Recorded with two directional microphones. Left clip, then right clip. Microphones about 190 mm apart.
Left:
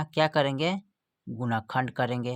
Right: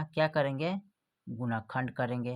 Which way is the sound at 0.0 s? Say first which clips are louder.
Left 4 dB; 30° left (ahead or behind).